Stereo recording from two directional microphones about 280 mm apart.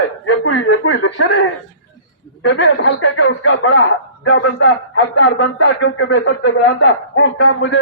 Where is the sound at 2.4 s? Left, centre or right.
Left.